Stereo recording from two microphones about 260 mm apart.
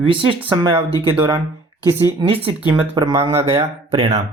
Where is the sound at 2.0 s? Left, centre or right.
Centre.